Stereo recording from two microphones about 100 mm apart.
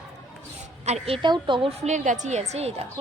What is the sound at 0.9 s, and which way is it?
Speech, 80° right.